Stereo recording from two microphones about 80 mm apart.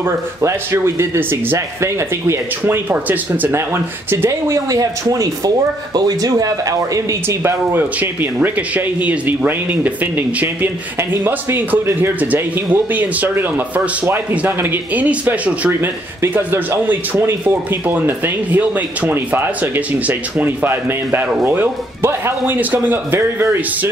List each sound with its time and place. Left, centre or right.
0.4 s speech: right
4.3 s speech: right
7.2 s speech: right
8.0 s speech: right
23.1 s speech: right